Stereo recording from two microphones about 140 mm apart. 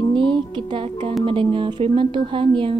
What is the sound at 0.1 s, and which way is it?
Music, 35° right (ahead or behind).